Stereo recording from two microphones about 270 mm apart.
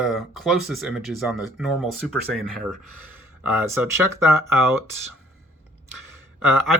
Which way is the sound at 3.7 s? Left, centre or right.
Centre.